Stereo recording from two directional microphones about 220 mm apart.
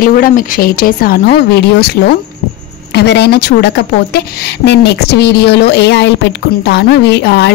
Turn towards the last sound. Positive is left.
turn(degrees=50)  # may be behind; listen again after turning